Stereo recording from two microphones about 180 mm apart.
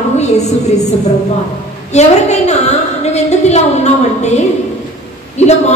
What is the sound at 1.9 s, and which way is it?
A woman's voice, 40° left (ahead or behind).